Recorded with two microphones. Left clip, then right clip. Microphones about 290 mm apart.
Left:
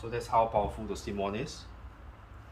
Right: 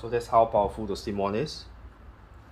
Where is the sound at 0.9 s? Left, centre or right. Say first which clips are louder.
Right 6 dB; centre.